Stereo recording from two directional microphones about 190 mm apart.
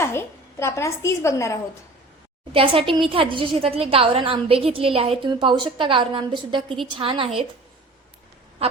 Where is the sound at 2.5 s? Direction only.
30° right (ahead or behind).